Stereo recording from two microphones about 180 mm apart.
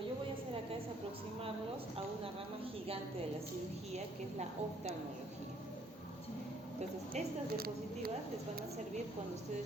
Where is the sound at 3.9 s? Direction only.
40° right (ahead or behind).